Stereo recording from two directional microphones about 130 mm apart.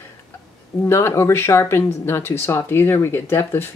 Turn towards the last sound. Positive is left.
turn(degrees=20)  # may be behind; listen again after turning